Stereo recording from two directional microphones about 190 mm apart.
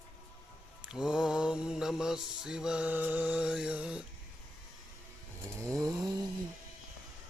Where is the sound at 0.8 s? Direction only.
5° right (ahead or behind).